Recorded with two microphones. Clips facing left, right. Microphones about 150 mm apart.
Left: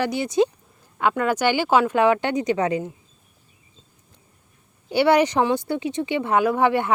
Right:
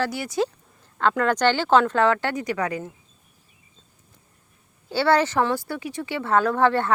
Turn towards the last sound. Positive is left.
turn(degrees=15)  # may be behind; listen again after turning